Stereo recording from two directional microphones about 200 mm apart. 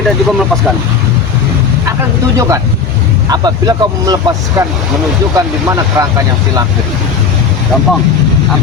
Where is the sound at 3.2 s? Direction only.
20° right (ahead or behind).